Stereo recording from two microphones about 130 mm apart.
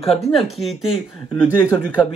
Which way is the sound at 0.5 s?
Centre (ahead or behind).